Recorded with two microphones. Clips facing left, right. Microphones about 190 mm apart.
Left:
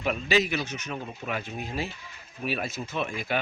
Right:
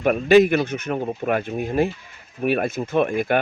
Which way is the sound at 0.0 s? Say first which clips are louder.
Right 11 dB; 55° right (ahead or behind).